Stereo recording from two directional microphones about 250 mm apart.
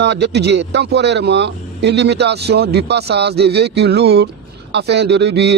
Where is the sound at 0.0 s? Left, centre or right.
Right.